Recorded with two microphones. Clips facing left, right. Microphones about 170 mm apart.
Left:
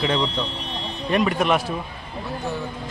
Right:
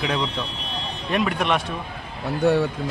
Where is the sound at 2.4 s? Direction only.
65° right (ahead or behind).